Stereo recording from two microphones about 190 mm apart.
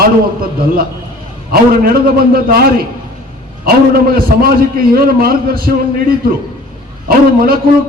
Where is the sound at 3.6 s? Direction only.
50° right (ahead or behind).